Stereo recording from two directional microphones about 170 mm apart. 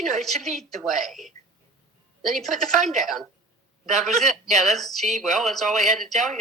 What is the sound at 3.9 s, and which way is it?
A man's voice, centre (ahead or behind).